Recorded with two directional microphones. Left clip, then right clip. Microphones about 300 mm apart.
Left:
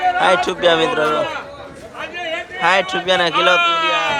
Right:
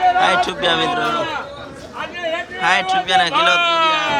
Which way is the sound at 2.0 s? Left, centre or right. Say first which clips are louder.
Right 1 dB; right.